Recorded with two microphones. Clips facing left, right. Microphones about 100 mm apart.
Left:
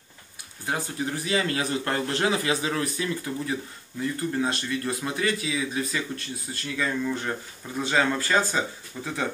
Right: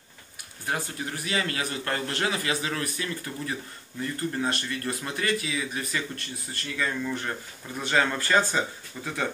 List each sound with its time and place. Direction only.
0.7 s a man's voice: 20° left (ahead or behind)